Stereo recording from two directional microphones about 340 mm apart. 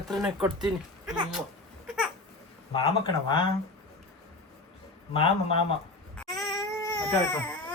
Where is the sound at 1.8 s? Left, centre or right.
Centre.